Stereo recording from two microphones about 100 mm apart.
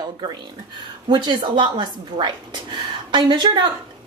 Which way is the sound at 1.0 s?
50° right (ahead or behind).